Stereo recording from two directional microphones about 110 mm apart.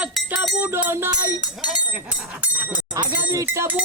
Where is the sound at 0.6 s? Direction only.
20° right (ahead or behind).